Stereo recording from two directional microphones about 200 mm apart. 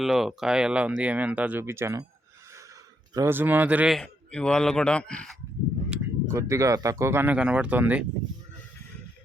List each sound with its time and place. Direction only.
0.0 s speech: centre (ahead or behind)
3.2 s a man's voice: 10° right (ahead or behind); by 5.4 s 5° left (ahead or behind)
5.9 s speech: 15° right (ahead or behind)